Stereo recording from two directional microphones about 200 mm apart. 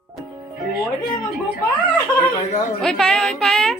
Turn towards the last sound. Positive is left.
turn(degrees=5)  # may be behind; listen again after turning